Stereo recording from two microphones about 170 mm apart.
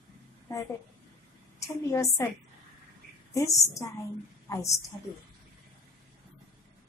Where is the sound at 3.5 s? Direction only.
20° left (ahead or behind).